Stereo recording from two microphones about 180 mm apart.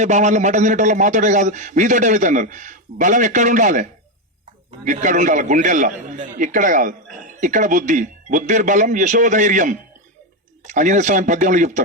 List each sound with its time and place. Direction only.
0.0 s a man's voice: 40° right (ahead or behind)
4.9 s a man's voice: 45° right (ahead or behind)